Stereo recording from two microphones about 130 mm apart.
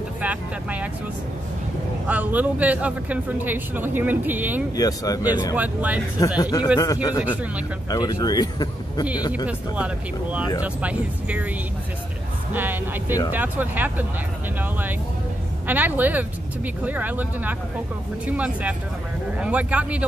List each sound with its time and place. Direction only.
0.2 s vehicle: 10° right (ahead or behind)
2.0 s speech: 10° right (ahead or behind)
4.7 s speech: 30° left (ahead or behind)
5.5 s speech: 10° right (ahead or behind)
6.1 s speech: 30° left (ahead or behind)
9.5 s speech: 10° right (ahead or behind)
12.5 s speech: 15° right (ahead or behind)